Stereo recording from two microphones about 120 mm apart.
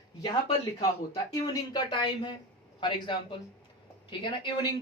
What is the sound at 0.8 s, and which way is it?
Speech, 35° left (ahead or behind).